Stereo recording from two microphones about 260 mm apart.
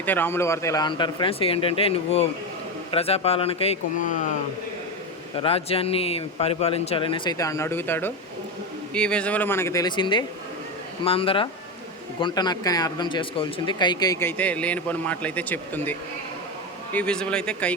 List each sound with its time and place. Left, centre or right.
0.0 s speech: centre; by 4.4 s left
5.4 s speech: left; by 17.7 s centre